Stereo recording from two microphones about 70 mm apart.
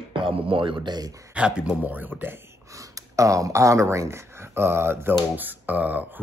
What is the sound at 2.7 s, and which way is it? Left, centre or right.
Speech, right.